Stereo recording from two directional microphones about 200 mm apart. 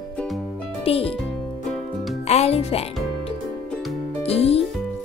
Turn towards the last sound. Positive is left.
turn(degrees=30)  # may be behind; listen again after turning